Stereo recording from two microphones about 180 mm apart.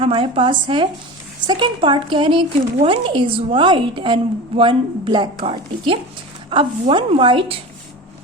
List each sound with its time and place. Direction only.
0.0 s a woman's voice: 30° right (ahead or behind)